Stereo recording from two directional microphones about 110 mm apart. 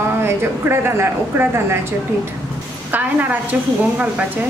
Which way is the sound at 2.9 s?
15° right (ahead or behind).